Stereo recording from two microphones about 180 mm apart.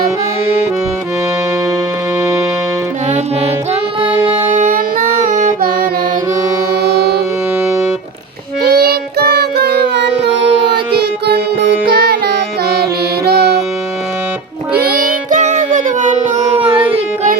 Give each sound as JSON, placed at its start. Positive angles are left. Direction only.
{"t": 3.1, "sound": "music", "side_deg": -35}
{"t": 4.5, "sound": "music", "side_deg": -45}
{"t": 6.8, "sound": "music", "side_deg": -65}
{"t": 7.6, "sound": "music", "side_deg": -15}
{"t": 8.6, "sound": "child singing", "side_deg": -60}
{"t": 11.9, "sound": "music", "side_deg": -60}
{"t": 14.8, "sound": "child singing", "side_deg": -55}